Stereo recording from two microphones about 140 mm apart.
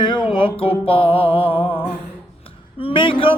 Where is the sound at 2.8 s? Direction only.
40° left (ahead or behind).